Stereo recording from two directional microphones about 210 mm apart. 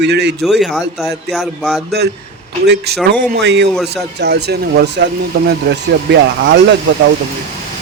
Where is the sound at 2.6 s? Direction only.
50° right (ahead or behind).